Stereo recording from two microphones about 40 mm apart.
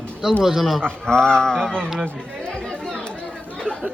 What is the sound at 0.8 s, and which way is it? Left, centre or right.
Speech, centre.